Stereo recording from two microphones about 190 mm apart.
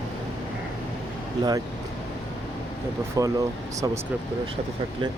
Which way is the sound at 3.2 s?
15° right (ahead or behind).